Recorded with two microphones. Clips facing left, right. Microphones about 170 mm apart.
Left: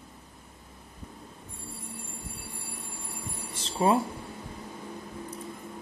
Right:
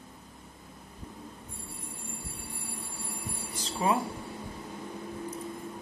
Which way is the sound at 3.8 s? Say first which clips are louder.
Left 4 dB; 30° left (ahead or behind).